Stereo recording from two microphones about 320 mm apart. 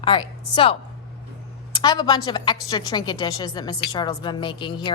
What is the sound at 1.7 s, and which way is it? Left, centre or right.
A woman's voice, centre.